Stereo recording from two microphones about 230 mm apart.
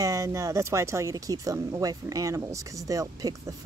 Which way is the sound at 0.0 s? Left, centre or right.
Centre.